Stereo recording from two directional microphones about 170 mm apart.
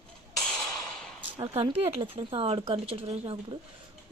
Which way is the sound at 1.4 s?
35° right (ahead or behind).